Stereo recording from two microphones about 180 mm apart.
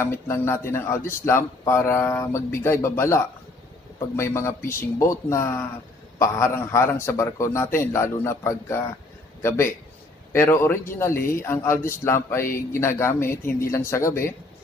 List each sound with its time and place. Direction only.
0.0 s speech: 15° left (ahead or behind)
4.2 s speech: 15° left (ahead or behind)